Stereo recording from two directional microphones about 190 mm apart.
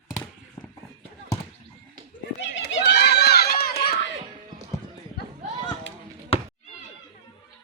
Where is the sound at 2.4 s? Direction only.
70° left (ahead or behind); by 3.9 s 55° left (ahead or behind).